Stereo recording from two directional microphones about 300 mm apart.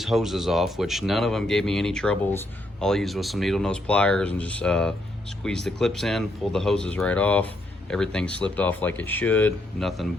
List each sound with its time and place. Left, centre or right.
0.0 s speech: centre